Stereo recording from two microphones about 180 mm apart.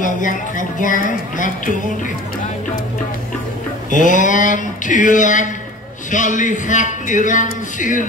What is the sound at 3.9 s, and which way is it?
Speech, 45° left (ahead or behind).